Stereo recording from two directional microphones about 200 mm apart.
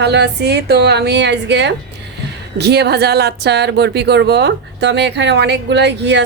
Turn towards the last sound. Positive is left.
turn(degrees=-60)  # may be behind; listen again after turning